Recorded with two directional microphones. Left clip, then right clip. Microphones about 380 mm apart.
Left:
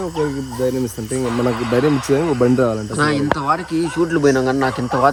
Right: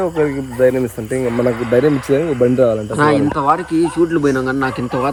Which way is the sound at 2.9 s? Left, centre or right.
Centre.